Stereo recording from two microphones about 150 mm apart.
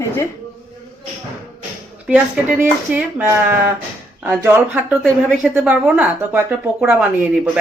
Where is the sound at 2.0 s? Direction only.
10° right (ahead or behind).